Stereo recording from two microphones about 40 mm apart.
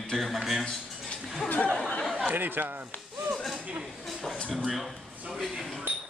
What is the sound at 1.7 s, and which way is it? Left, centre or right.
Chatter, left.